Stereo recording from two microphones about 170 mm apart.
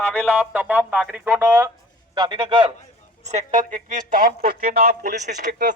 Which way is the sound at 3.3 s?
45° right (ahead or behind).